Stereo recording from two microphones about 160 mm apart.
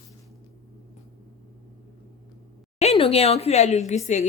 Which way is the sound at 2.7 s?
40° left (ahead or behind).